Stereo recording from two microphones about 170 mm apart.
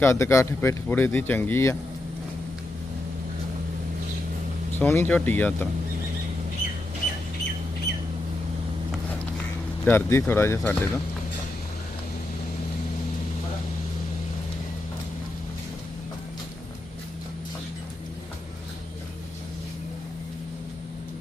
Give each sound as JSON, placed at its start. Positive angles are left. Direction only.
{"t": 0.0, "sound": "speech", "side_deg": 15}
{"t": 4.8, "sound": "speech", "side_deg": 10}
{"t": 9.8, "sound": "speech", "side_deg": 15}